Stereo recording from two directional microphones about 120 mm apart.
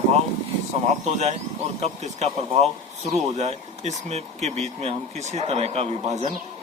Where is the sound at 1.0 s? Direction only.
65° right (ahead or behind).